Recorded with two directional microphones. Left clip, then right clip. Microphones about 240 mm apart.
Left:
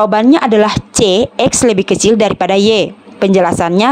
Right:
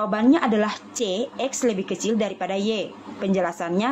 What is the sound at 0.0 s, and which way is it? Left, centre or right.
A woman's voice, left.